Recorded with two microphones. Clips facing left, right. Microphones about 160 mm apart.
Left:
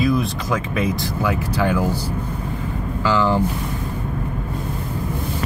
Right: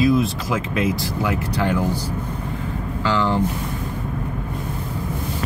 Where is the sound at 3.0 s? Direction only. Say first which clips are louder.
Left 2 dB; 10° left (ahead or behind).